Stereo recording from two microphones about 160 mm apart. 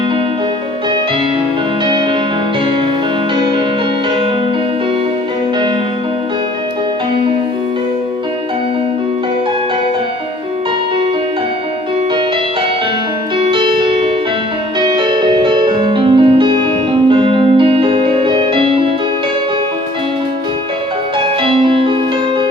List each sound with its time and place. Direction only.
1.8 s music: 30° right (ahead or behind)
13.5 s music: 30° right (ahead or behind)
14.8 s music: 30° right (ahead or behind)
21.4 s music: 35° right (ahead or behind)